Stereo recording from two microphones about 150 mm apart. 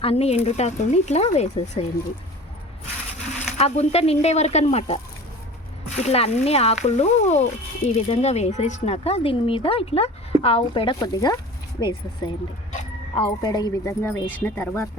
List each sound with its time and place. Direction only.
0.0 s speech: 40° left (ahead or behind)
3.6 s speech: 45° left (ahead or behind)
6.0 s speech: 45° left (ahead or behind); by 14.8 s 15° left (ahead or behind)